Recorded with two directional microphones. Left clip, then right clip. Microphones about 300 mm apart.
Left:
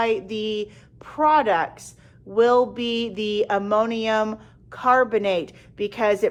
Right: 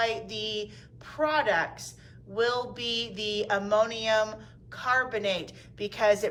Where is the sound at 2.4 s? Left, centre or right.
Centre.